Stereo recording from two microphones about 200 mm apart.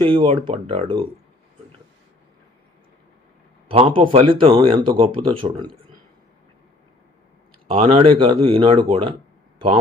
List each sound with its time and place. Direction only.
0.0 s speech: 25° right (ahead or behind)
3.7 s speech: 25° right (ahead or behind)
7.9 s speech: 25° right (ahead or behind)